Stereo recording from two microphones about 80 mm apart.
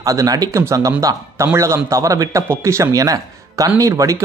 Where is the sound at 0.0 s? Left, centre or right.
Right.